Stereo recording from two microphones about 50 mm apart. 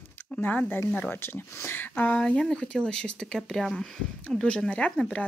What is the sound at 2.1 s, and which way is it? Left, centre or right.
Speech, centre.